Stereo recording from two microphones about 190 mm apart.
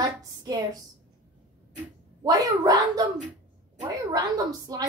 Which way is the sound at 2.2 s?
20° right (ahead or behind).